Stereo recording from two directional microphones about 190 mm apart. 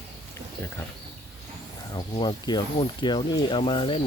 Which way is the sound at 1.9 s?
25° left (ahead or behind).